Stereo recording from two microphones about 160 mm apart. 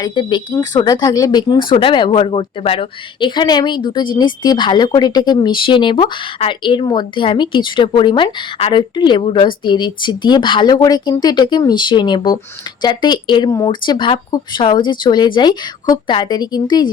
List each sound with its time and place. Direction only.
0.0 s speech: 25° left (ahead or behind)